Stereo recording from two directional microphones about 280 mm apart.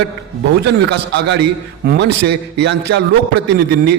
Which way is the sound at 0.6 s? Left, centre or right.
Right.